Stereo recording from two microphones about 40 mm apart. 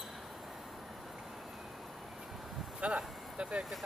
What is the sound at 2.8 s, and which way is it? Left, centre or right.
Vehicle, right.